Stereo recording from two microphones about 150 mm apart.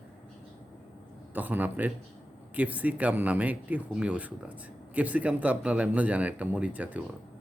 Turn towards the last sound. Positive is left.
turn(degrees=-10)  # may be behind; listen again after turning